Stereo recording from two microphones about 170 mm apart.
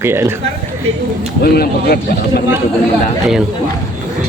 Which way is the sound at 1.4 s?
65° left (ahead or behind).